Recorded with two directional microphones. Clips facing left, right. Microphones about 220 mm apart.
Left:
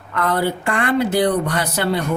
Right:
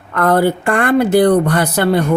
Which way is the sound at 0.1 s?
50° right (ahead or behind).